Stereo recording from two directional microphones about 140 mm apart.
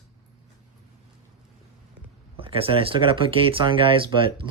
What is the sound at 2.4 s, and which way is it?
Speech, 40° right (ahead or behind).